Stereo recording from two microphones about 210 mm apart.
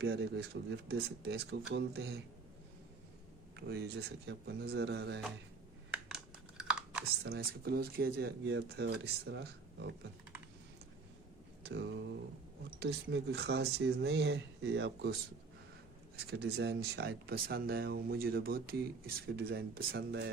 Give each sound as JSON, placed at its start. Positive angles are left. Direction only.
{"t": 0.0, "sound": "speech", "side_deg": -50}
{"t": 3.5, "sound": "speech", "side_deg": -50}
{"t": 6.6, "sound": "chewing", "side_deg": -5}
{"t": 7.3, "sound": "speech", "side_deg": -50}
{"t": 11.6, "sound": "a sound", "side_deg": -55}
{"t": 12.8, "sound": "speech", "side_deg": -55}
{"t": 16.1, "sound": "speech", "side_deg": -50}